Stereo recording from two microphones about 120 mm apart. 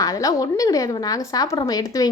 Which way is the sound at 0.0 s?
30° left (ahead or behind).